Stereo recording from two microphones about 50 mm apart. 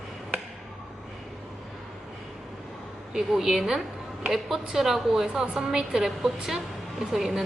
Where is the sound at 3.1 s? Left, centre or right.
Centre.